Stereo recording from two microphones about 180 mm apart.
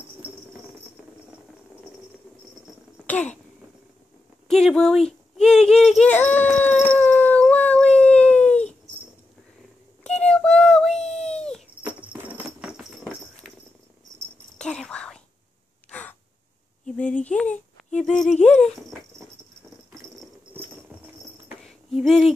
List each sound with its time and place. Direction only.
4.5 s speech: centre (ahead or behind)
5.4 s baby cry: 5° left (ahead or behind)
10.0 s child singing: 5° left (ahead or behind)
11.2 s wail: 5° left (ahead or behind)
11.8 s horse: 5° right (ahead or behind)
14.1 s cricket: 20° right (ahead or behind)
14.6 s whispering: 5° left (ahead or behind)
15.9 s gasp: 10° left (ahead or behind)
16.8 s a sound: 5° left (ahead or behind)
21.9 s a sound: centre (ahead or behind)